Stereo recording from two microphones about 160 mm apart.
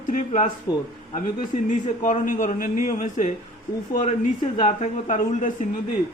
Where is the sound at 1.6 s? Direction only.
50° left (ahead or behind).